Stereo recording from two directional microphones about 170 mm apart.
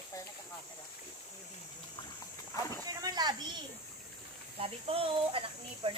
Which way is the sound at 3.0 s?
25° right (ahead or behind).